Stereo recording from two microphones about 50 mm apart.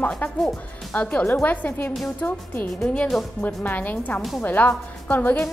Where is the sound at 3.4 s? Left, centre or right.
Left.